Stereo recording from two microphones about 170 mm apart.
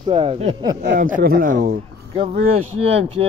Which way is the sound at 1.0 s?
55° right (ahead or behind).